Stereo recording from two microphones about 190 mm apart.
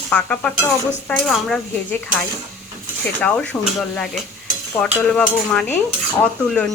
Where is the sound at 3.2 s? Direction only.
5° left (ahead or behind).